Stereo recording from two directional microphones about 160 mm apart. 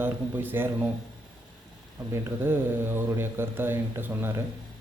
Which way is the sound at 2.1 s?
15° right (ahead or behind).